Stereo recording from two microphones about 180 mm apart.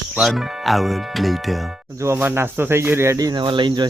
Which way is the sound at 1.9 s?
15° right (ahead or behind).